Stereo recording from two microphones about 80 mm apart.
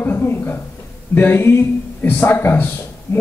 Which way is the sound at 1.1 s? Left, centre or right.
Left.